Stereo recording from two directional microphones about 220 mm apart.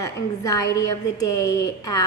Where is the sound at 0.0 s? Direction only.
15° left (ahead or behind).